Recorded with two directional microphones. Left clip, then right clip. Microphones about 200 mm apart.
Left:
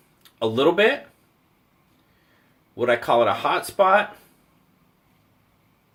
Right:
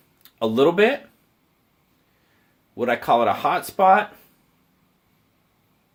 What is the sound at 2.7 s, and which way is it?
Speech, 50° right (ahead or behind).